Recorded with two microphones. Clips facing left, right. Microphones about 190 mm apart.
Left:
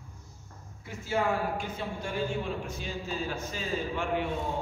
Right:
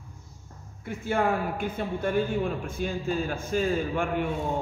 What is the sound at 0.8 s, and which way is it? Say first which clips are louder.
A man's voice: right 4 dB; 55° right (ahead or behind).